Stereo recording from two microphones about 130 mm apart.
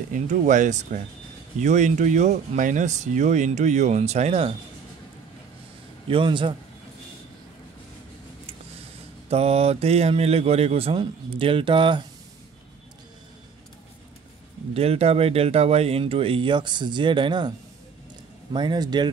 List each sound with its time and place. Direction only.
0.1 s speech: 75° right (ahead or behind); by 4.6 s 50° right (ahead or behind)
6.0 s speech: 40° right (ahead or behind)
9.3 s speech: 50° right (ahead or behind)
14.7 s speech: 50° right (ahead or behind); by 19.0 s 35° right (ahead or behind)